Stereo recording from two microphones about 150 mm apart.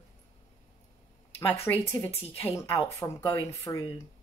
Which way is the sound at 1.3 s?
15° left (ahead or behind).